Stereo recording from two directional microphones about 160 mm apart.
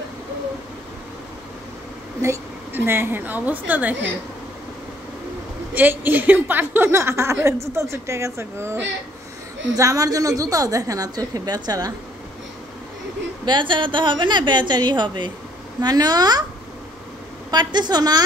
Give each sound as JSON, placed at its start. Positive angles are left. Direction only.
{"t": 2.2, "sound": "a woman's voice", "side_deg": -15}
{"t": 5.8, "sound": "a woman's voice", "side_deg": -10}
{"t": 9.8, "sound": "a woman's voice", "side_deg": -20}
{"t": 13.5, "sound": "a woman's voice", "side_deg": -30}
{"t": 17.5, "sound": "a woman's voice", "side_deg": -25}